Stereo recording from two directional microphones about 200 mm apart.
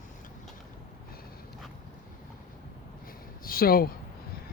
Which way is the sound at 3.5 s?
45° left (ahead or behind).